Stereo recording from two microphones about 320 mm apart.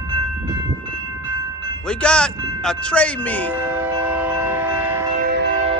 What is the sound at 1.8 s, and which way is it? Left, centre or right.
Speech, centre.